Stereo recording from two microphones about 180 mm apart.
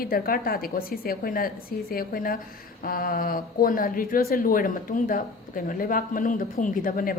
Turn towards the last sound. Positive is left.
turn(degrees=50)  # may be behind; listen again after turning